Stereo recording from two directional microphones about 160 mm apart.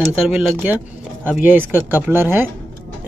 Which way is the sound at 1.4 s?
10° right (ahead or behind).